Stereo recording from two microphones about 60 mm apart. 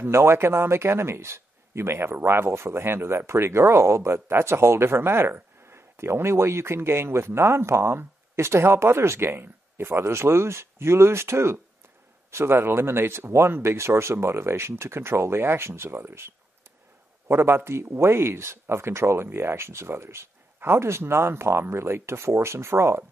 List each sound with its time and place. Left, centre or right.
0.0 s speech: right